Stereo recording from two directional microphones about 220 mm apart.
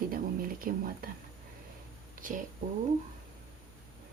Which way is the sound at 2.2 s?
35° right (ahead or behind).